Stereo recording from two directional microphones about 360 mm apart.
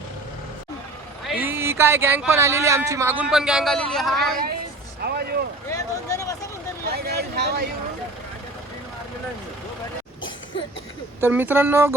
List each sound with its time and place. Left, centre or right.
1.3 s speech: centre
5.0 s vehicle: right
5.7 s a sound: centre
6.8 s vehicle: right
11.2 s speech: centre